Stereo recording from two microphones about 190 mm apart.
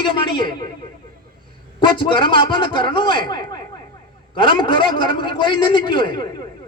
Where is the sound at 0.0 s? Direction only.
25° left (ahead or behind).